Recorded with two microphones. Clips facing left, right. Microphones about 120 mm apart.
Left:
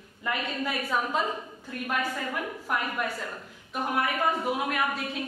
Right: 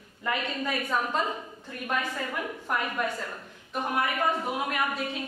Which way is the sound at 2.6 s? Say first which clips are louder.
Right 1 dB; 5° left (ahead or behind).